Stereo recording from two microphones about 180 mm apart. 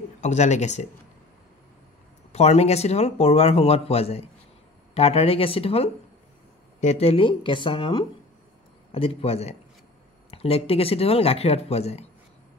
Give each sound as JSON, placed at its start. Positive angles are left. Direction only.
{"t": 0.2, "sound": "speech", "side_deg": 40}
{"t": 2.3, "sound": "speech", "side_deg": 35}